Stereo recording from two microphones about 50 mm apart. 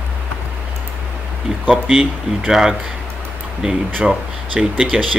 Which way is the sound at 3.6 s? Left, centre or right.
Right.